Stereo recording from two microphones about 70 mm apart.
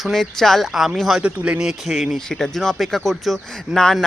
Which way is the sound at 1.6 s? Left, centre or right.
Centre.